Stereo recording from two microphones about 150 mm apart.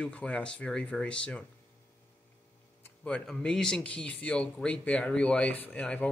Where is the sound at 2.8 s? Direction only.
5° left (ahead or behind).